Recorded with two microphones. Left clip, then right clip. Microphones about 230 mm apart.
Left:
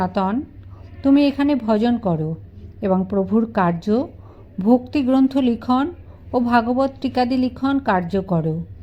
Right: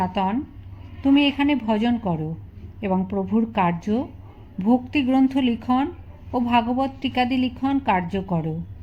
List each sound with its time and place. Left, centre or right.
0.0 s a woman's voice: centre